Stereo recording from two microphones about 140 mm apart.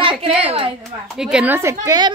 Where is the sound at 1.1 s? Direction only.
5° right (ahead or behind); by 2.1 s 25° right (ahead or behind).